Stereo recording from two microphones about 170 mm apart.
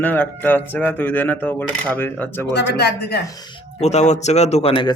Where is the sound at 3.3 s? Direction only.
25° left (ahead or behind).